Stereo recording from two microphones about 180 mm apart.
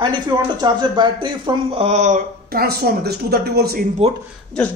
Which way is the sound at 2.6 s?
60° right (ahead or behind).